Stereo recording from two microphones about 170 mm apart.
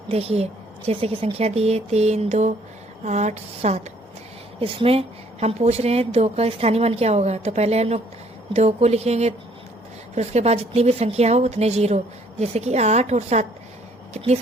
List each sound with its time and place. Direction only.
0.1 s a woman's voice: 35° right (ahead or behind)